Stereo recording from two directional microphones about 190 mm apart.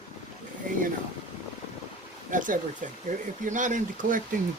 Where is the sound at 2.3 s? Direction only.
45° right (ahead or behind).